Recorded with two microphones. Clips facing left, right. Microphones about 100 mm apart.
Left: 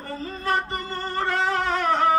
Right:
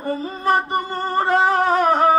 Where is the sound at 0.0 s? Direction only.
15° right (ahead or behind).